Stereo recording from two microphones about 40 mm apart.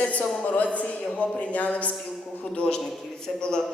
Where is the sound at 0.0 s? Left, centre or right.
Left.